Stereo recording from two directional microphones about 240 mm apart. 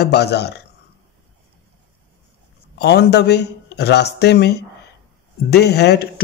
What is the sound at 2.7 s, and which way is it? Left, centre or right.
A man's voice, left.